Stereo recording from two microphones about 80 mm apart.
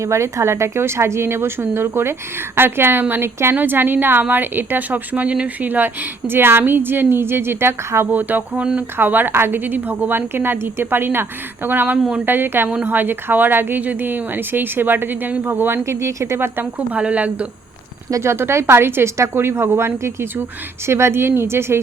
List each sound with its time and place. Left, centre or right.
0.0 s a woman's voice: right
17.0 s speech: centre
18.1 s speech: right